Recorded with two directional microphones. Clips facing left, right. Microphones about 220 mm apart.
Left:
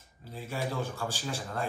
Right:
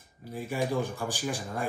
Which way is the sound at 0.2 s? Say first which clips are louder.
Right 4 dB; 15° right (ahead or behind).